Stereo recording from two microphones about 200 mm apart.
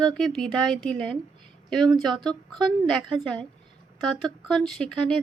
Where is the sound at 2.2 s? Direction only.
5° left (ahead or behind).